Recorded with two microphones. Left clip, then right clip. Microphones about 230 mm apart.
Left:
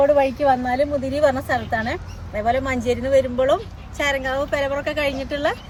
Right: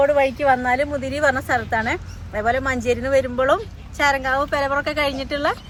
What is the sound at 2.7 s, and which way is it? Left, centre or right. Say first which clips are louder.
Speech: right 1 dB; right.